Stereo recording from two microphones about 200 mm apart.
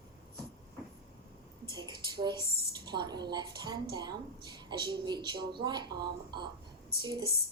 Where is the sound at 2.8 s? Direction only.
20° right (ahead or behind).